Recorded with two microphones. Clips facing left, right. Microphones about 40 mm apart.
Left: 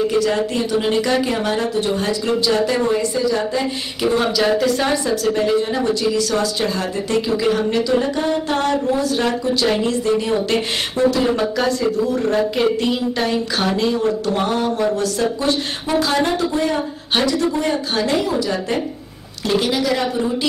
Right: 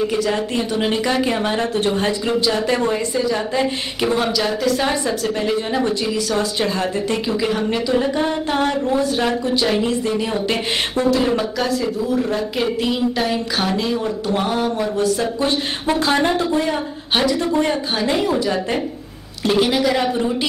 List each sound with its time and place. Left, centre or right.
0.1 s speech: centre
2.0 s speech: right
2.4 s speech: centre
4.2 s speech: centre
5.0 s speech: centre
15.4 s speech: right
19.4 s speech: centre